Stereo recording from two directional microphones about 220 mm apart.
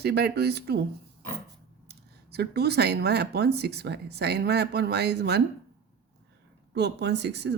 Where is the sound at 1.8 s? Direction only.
45° right (ahead or behind).